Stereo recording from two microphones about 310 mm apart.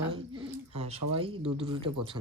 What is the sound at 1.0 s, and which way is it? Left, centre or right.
Speech, right.